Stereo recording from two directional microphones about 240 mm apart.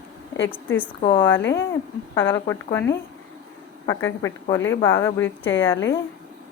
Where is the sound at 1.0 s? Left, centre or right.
Centre.